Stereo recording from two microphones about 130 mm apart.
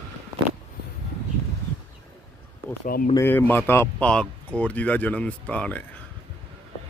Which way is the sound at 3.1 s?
15° left (ahead or behind).